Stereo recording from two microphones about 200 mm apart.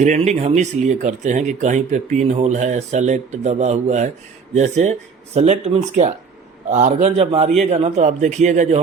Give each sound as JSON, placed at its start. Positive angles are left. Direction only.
{"t": 0.0, "sound": "speech", "side_deg": -35}